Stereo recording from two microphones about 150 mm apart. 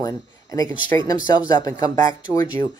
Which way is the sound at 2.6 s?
75° right (ahead or behind).